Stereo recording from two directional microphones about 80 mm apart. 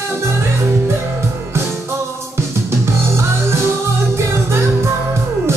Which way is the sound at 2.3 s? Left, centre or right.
Right.